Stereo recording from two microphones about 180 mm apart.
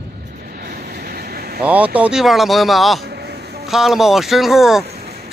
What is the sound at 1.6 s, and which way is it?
Speech, 5° right (ahead or behind).